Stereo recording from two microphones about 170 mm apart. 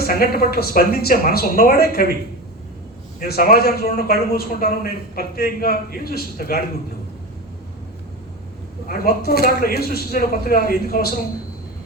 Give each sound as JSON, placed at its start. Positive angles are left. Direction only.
{"t": 0.0, "sound": "a man's voice", "side_deg": 65}
{"t": 3.2, "sound": "a man's voice", "side_deg": 60}
{"t": 8.9, "sound": "a man's voice", "side_deg": 65}